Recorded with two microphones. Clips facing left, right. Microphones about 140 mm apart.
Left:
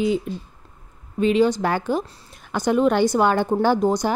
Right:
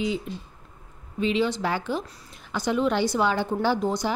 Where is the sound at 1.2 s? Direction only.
45° left (ahead or behind).